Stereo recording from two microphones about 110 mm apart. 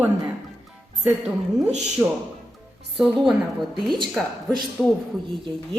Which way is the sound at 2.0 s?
15° right (ahead or behind).